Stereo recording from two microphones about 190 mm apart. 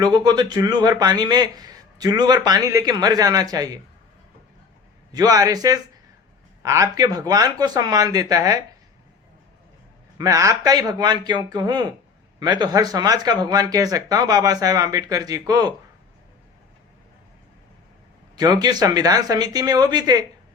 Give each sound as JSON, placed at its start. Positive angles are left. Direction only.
{"t": 0.0, "sound": "speech", "side_deg": -20}
{"t": 5.1, "sound": "speech", "side_deg": -20}
{"t": 10.2, "sound": "speech", "side_deg": -20}
{"t": 18.3, "sound": "speech", "side_deg": -20}